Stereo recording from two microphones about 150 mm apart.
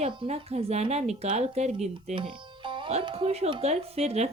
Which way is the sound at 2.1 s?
35° right (ahead or behind).